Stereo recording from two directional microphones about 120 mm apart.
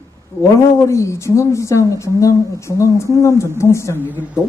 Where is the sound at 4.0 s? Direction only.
15° right (ahead or behind).